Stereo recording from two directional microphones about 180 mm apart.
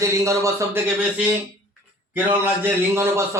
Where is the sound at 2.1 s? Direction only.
10° right (ahead or behind).